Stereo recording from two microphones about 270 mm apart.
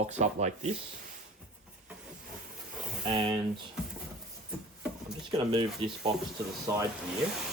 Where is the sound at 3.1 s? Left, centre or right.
Centre.